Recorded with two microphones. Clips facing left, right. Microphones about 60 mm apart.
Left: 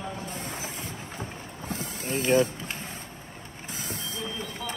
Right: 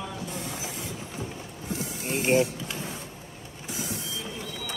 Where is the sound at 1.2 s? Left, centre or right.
Left.